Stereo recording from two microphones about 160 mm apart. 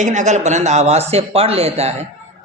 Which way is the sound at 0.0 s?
50° right (ahead or behind).